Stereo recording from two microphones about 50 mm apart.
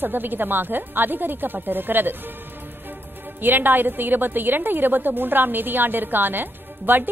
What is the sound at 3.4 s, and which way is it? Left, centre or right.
A woman's voice, right.